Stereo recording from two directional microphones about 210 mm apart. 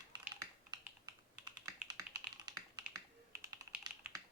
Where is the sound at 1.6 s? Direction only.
15° right (ahead or behind).